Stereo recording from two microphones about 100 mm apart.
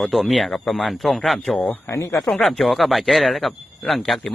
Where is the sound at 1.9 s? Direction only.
30° left (ahead or behind).